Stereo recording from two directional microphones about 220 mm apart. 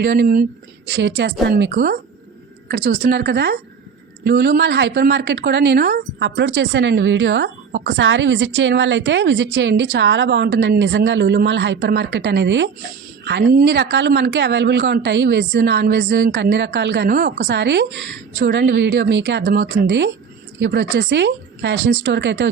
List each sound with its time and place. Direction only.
0.0 s a woman's voice: 45° right (ahead or behind)